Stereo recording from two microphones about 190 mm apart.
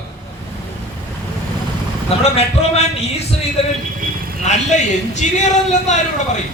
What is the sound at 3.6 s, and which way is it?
Speech, 35° left (ahead or behind).